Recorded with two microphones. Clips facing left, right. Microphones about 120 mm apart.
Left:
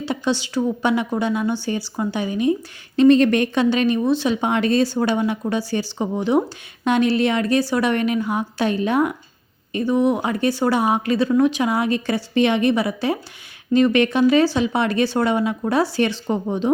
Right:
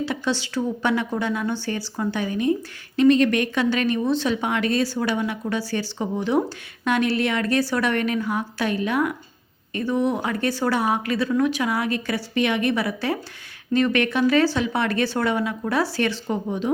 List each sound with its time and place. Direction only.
0.0 s a woman's voice: 20° left (ahead or behind)
4.4 s speech: 25° left (ahead or behind)